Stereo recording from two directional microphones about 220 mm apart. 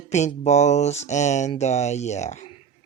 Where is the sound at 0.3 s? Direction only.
30° left (ahead or behind).